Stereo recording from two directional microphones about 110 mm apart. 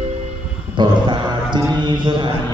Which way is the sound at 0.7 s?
45° right (ahead or behind).